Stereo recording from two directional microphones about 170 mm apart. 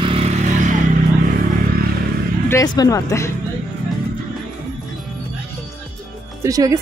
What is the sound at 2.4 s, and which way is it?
Speech, 20° left (ahead or behind).